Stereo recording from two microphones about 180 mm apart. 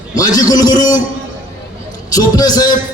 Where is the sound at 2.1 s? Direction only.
20° left (ahead or behind).